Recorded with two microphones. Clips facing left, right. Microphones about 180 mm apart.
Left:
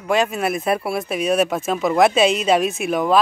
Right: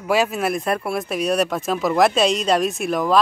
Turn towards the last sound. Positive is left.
turn(degrees=0)  # may be behind; listen again after turning